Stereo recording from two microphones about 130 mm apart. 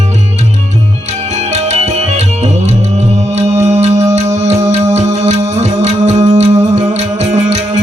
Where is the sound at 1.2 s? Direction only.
60° right (ahead or behind).